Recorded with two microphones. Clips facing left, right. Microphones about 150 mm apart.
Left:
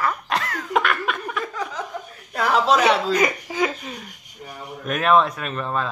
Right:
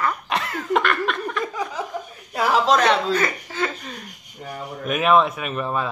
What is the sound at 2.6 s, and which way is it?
Chuckle, 10° left (ahead or behind).